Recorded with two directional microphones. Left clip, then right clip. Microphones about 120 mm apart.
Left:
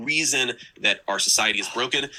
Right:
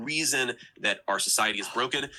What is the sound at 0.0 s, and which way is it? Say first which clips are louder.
Speech: left 5 dB; 15° left (ahead or behind).